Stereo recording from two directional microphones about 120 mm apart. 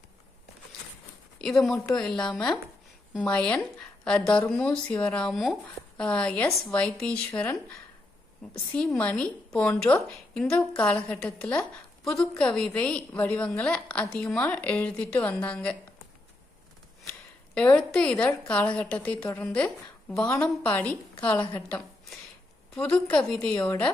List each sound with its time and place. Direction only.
1.4 s a woman's voice: 5° left (ahead or behind)
8.7 s a woman's voice: 5° left (ahead or behind)
17.7 s a woman's voice: 5° left (ahead or behind)
22.7 s a woman's voice: 5° left (ahead or behind)
23.6 s a woman's voice: 20° left (ahead or behind)